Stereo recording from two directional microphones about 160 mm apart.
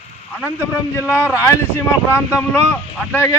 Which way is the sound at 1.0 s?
10° right (ahead or behind).